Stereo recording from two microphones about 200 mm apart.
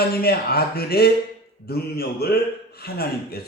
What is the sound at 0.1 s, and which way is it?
A man's voice, 50° left (ahead or behind).